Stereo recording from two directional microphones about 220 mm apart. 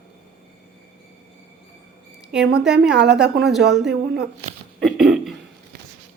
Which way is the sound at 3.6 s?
50° right (ahead or behind).